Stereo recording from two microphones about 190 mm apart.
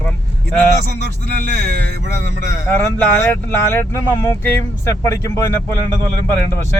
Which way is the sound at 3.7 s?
10° left (ahead or behind).